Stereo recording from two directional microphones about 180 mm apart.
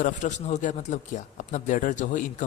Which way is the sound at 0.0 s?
40° left (ahead or behind).